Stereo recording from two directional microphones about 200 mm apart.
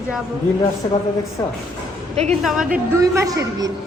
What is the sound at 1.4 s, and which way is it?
Speech, 15° left (ahead or behind).